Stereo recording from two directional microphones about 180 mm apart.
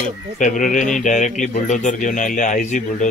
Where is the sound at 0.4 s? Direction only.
45° left (ahead or behind).